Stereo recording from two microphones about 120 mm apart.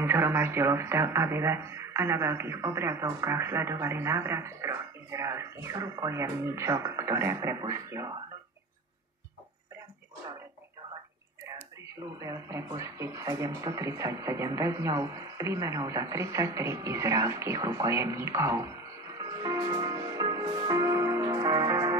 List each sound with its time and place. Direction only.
0.0 s speech: 20° right (ahead or behind)
12.2 s speech: 25° right (ahead or behind)
19.1 s music: 30° right (ahead or behind)